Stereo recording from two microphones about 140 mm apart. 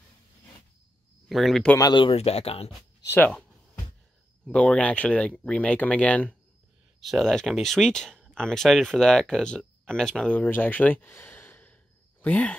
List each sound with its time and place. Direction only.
1.3 s speech: centre (ahead or behind)
1.8 s speech: 35° left (ahead or behind)
4.5 s speech: 5° left (ahead or behind)